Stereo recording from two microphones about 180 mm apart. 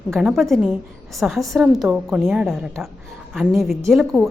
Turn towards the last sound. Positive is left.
turn(degrees=0)  # may be behind; listen again after turning